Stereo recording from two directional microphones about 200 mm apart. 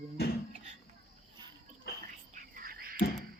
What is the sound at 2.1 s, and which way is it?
Whispering, 45° right (ahead or behind).